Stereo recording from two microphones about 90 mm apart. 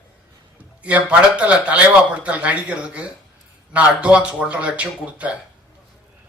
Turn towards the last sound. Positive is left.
turn(degrees=-15)  # may be behind; listen again after turning